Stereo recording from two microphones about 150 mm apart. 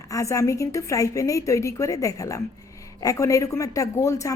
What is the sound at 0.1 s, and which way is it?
A woman's voice, 20° left (ahead or behind).